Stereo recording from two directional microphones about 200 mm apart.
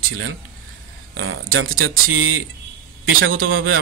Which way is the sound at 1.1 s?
90° right.